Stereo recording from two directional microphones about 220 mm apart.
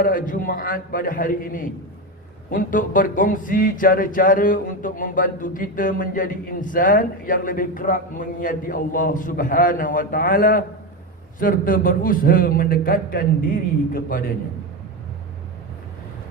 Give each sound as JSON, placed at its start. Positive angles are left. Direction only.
{"t": 0.0, "sound": "speech", "side_deg": 40}